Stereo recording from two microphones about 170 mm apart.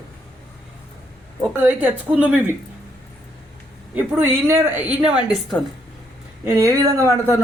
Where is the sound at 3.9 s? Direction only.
10° right (ahead or behind).